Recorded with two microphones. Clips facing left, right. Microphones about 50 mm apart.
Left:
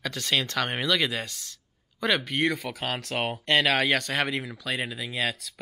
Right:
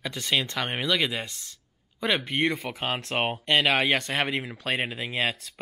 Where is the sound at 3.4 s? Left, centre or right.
Centre.